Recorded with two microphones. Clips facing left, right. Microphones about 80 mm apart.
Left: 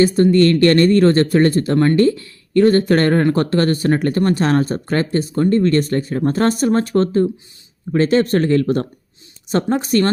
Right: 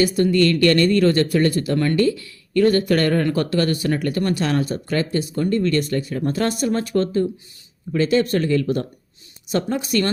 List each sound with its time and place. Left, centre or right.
0.0 s speech: left